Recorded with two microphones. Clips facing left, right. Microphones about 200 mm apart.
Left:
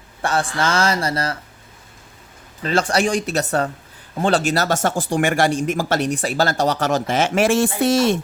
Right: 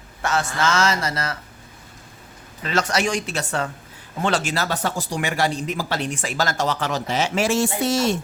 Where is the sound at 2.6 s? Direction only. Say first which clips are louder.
Left 4 dB; 35° left (ahead or behind); by 8.1 s 55° left (ahead or behind).